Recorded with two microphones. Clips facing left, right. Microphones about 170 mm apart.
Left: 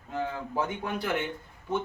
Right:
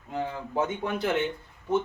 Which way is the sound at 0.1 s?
20° right (ahead or behind).